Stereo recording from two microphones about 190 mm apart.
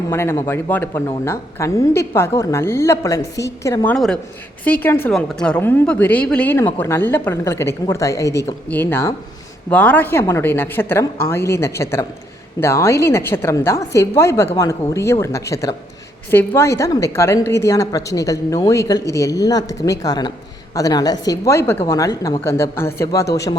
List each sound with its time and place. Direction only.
0.1 s a woman's voice: 15° left (ahead or behind)
3.9 s a woman's voice: centre (ahead or behind); by 23.6 s 20° left (ahead or behind)